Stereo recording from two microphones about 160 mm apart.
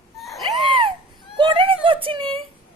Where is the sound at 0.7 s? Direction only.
30° right (ahead or behind).